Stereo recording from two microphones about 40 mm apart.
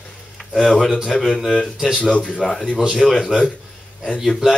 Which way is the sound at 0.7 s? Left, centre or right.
Centre.